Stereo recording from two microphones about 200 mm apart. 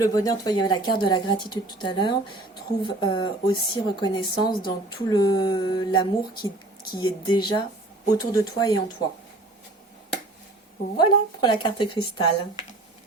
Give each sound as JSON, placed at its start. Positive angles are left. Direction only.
{"t": 0.0, "sound": "speech", "side_deg": 20}
{"t": 10.9, "sound": "speech", "side_deg": 20}